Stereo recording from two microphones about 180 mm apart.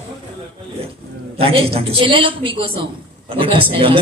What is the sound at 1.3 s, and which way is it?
A man's voice, 30° right (ahead or behind).